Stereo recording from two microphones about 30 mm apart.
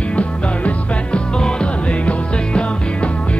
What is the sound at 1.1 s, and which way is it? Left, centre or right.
Music, left.